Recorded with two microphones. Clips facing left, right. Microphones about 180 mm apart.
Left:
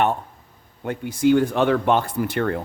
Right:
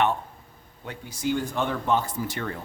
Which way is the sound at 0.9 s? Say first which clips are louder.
Left 10 dB; 55° left (ahead or behind).